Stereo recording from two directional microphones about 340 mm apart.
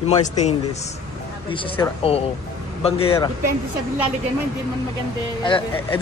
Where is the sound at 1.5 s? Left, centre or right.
Centre.